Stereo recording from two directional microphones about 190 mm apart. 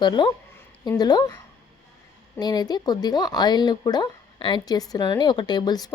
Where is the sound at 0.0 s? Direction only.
25° left (ahead or behind).